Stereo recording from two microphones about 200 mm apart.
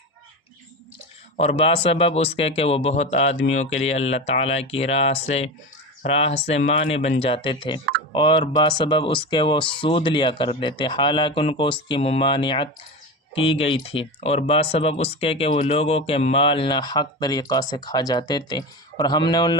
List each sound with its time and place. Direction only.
1.4 s speech: 30° left (ahead or behind)